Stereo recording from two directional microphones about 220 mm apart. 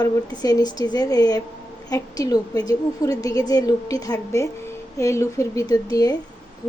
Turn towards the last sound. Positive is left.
turn(degrees=15)  # may be behind; listen again after turning